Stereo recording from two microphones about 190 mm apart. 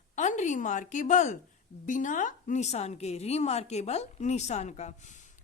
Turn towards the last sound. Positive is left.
turn(degrees=40)  # may be behind; listen again after turning